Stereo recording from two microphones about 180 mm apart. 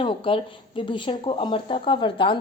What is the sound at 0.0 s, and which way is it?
A woman's voice, 30° left (ahead or behind).